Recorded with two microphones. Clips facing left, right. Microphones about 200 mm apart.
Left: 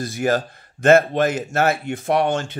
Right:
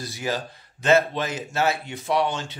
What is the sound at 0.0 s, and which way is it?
Speech, 50° left (ahead or behind).